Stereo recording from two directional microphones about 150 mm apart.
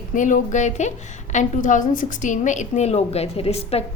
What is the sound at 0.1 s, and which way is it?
A woman's voice, 60° left (ahead or behind).